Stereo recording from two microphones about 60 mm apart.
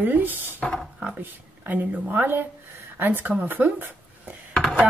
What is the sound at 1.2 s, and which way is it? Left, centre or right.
Speech, right.